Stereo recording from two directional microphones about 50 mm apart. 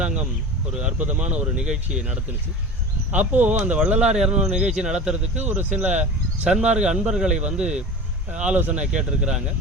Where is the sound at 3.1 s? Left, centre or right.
Right.